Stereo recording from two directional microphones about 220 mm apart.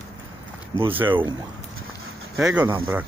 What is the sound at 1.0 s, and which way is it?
Speech, 20° right (ahead or behind).